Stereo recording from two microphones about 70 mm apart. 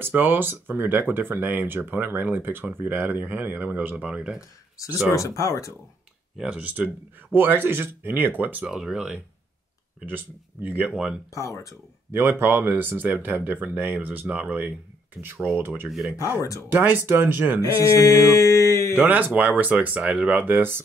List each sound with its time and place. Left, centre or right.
0.0 s speech: right
3.9 s speech: centre
4.4 s mantra: left
6.3 s speech: centre
7.3 s speech: right
8.6 s speech: centre
10.0 s speech: right
11.3 s mantra: left
12.1 s speech: right
16.2 s mantra: left
16.6 s speech: right
17.6 s mantra: left
18.9 s speech: right
20.4 s speech: right